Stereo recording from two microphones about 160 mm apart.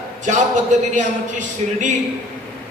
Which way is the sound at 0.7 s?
50° right (ahead or behind).